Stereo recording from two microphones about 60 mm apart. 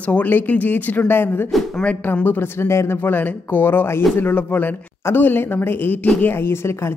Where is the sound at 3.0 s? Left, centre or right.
Left.